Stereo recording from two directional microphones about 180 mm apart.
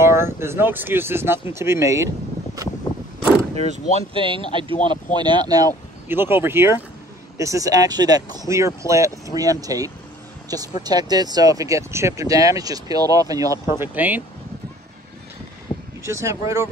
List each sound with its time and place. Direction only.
0.0 s speech: 15° right (ahead or behind)
3.6 s speech: 35° right (ahead or behind); by 14.2 s 10° right (ahead or behind)
16.0 s speech: 15° right (ahead or behind)